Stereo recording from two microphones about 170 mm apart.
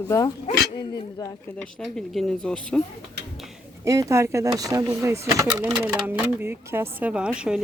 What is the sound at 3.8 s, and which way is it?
Speech, 20° right (ahead or behind).